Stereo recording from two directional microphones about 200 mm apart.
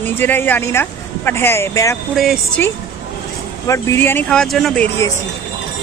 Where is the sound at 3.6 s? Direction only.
15° left (ahead or behind).